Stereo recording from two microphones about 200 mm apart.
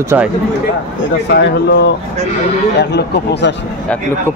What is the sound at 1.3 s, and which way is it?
A man's voice, 60° left (ahead or behind).